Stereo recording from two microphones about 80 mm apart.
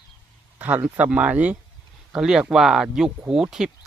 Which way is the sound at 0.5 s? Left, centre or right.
Right.